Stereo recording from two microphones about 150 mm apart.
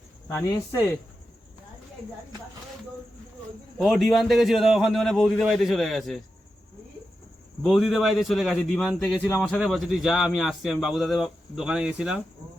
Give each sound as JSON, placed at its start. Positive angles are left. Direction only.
{"t": 0.3, "sound": "speech", "side_deg": 20}
{"t": 3.8, "sound": "a man's voice", "side_deg": 0}
{"t": 7.6, "sound": "a man's voice", "side_deg": 0}